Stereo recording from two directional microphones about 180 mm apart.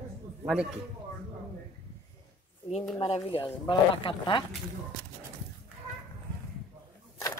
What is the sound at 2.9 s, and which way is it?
Speech, 35° left (ahead or behind).